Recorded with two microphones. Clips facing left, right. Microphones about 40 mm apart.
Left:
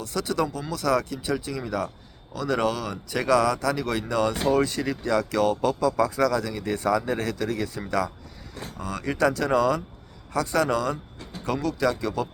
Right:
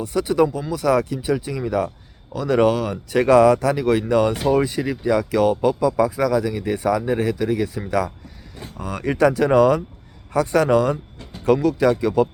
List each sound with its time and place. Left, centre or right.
0.0 s speech: centre
9.0 s speech: right